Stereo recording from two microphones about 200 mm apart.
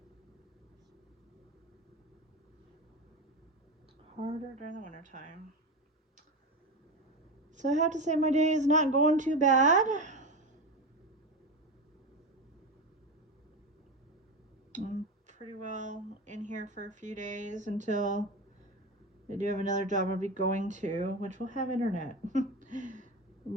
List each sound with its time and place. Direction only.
4.2 s speech: 40° right (ahead or behind)
7.5 s speech: 35° right (ahead or behind)
14.7 s a sound: 40° right (ahead or behind)
15.3 s speech: 40° right (ahead or behind)
19.3 s speech: 35° right (ahead or behind)